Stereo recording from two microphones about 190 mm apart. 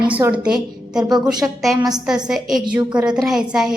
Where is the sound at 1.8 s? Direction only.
20° right (ahead or behind).